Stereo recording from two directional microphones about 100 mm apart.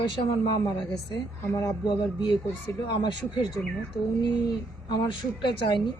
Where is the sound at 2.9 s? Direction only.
50° left (ahead or behind).